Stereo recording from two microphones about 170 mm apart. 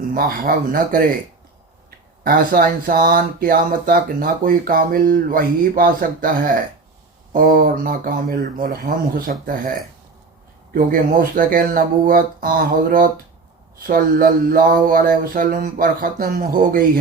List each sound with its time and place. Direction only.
0.1 s speech: 60° right (ahead or behind)
2.2 s speech: 55° right (ahead or behind)